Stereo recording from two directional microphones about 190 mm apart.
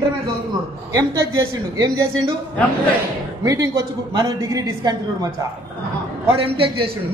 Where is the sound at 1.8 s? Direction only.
20° right (ahead or behind).